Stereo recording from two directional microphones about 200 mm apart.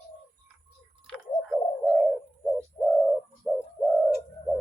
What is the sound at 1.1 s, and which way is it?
Bird, 5° right (ahead or behind).